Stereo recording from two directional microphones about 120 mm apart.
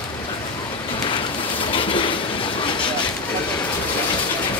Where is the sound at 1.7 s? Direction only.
45° left (ahead or behind).